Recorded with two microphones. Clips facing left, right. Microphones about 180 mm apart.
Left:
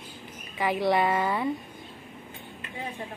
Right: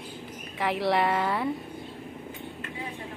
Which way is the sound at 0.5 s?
Centre (ahead or behind).